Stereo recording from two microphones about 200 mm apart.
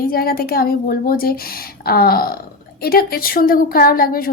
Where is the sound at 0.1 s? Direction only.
50° left (ahead or behind).